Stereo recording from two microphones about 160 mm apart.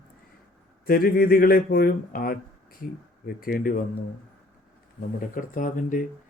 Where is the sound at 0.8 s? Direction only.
65° left (ahead or behind).